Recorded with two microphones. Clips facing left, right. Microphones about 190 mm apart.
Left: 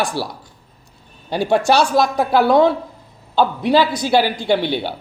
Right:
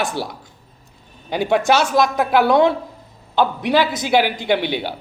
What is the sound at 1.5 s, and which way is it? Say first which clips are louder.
Speech: left 1 dB; 20° right (ahead or behind).